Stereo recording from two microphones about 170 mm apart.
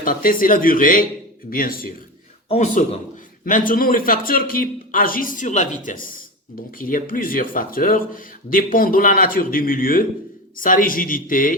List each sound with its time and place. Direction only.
0.0 s a man's voice: 55° left (ahead or behind)
2.5 s a man's voice: 40° left (ahead or behind)
3.4 s a man's voice: 55° left (ahead or behind)